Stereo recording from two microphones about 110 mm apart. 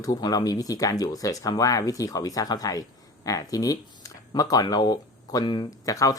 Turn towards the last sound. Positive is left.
turn(degrees=30)  # may be behind; listen again after turning